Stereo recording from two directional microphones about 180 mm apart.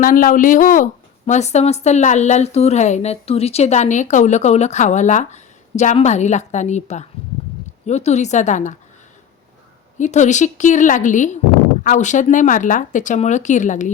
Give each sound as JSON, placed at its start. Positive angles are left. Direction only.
{"t": 0.0, "sound": "a woman's voice", "side_deg": 50}
{"t": 10.0, "sound": "speech", "side_deg": 40}